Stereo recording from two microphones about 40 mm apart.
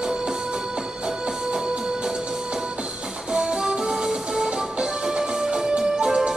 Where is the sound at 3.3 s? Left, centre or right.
Right.